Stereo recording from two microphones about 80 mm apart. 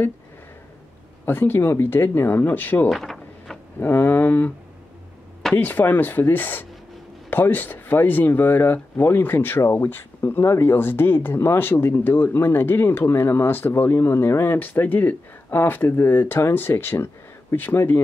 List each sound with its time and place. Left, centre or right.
1.2 s speech: left
2.9 s a sound: centre
3.8 s speech: left
5.6 s speech: left